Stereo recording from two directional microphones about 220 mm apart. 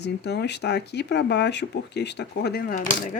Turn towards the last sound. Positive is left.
turn(degrees=40)  # may be behind; listen again after turning